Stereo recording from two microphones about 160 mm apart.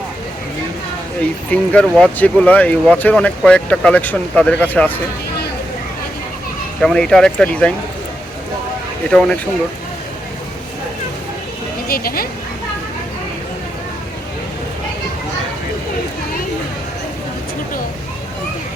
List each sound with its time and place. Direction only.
1.5 s speech: 5° left (ahead or behind)
6.8 s speech: 5° left (ahead or behind)
9.0 s speech: 5° left (ahead or behind)
11.9 s speech: 70° left (ahead or behind)